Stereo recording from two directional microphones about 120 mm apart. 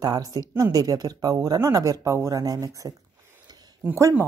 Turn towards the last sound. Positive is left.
turn(degrees=-25)  # may be behind; listen again after turning